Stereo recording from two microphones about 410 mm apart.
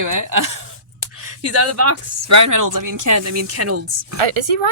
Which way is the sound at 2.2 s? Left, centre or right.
Right.